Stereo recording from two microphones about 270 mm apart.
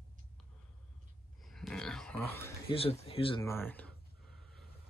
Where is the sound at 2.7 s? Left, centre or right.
Left; by 3.9 s centre.